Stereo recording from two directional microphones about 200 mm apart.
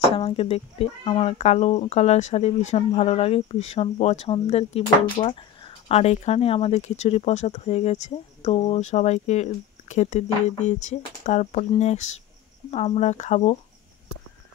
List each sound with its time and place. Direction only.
0.0 s speech: 30° left (ahead or behind)